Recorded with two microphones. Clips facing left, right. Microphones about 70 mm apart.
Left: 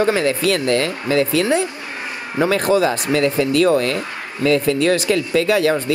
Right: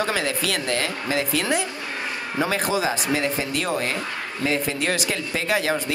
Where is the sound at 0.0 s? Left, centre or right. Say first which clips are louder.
Left 7 dB; left.